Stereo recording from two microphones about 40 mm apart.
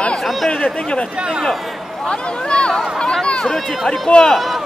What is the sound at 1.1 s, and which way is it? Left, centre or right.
Speech, right.